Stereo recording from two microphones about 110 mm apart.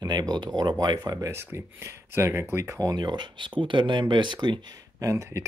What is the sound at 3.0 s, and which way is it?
Speech, 45° right (ahead or behind).